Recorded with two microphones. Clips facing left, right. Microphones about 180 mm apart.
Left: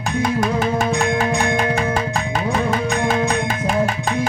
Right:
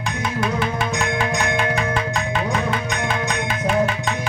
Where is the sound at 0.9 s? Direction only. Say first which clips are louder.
Left 4 dB; 30° left (ahead or behind).